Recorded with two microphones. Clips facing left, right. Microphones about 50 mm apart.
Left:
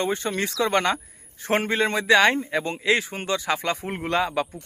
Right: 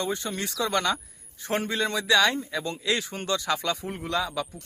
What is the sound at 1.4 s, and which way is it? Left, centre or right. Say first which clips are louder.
Speech: left 5 dB; left.